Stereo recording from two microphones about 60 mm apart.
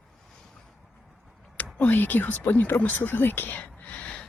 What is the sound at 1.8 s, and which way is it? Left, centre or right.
Speech, left.